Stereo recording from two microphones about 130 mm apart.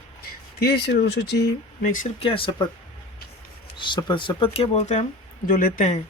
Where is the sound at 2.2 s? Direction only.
45° left (ahead or behind).